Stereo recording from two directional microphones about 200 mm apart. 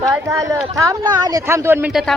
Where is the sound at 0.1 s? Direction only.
15° right (ahead or behind).